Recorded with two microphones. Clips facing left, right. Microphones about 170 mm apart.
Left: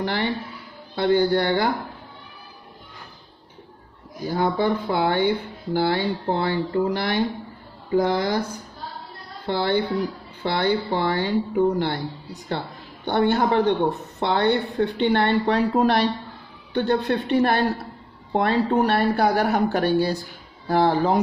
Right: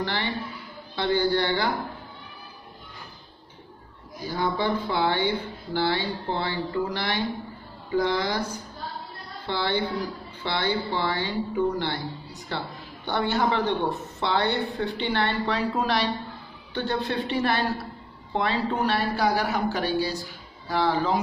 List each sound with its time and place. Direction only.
0.0 s a sound: 50° left (ahead or behind)
0.9 s speech: 50° left (ahead or behind)
4.2 s speech: 50° left (ahead or behind)
9.5 s speech: 45° left (ahead or behind)